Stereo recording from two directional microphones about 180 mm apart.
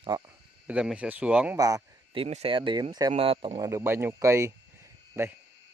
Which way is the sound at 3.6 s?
15° right (ahead or behind).